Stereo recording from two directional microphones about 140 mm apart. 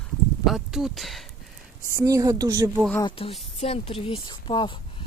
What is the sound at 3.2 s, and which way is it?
A woman's voice, 40° left (ahead or behind).